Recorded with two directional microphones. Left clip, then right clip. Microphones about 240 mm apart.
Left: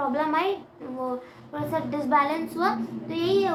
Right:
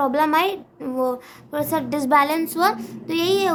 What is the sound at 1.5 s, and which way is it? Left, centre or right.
A woman's voice, right.